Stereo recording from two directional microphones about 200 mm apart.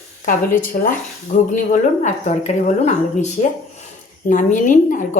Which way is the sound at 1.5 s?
40° left (ahead or behind).